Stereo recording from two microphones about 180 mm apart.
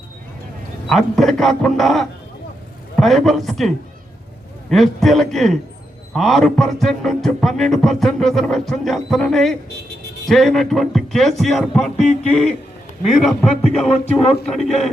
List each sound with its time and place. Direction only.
0.9 s music: centre (ahead or behind)
4.7 s music: centre (ahead or behind)
11.9 s a sound: 40° left (ahead or behind)
13.1 s music: centre (ahead or behind)